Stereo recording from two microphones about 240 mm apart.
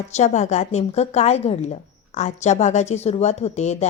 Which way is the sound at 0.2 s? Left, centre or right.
Left.